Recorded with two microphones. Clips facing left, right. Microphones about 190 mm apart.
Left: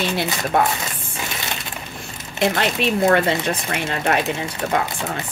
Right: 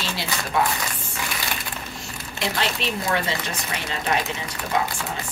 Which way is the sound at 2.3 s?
55° left (ahead or behind).